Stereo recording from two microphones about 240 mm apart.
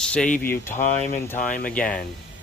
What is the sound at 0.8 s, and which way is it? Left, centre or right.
Speech, left.